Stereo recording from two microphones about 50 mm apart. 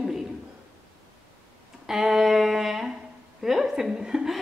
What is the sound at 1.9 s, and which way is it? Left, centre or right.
A woman's voice, centre.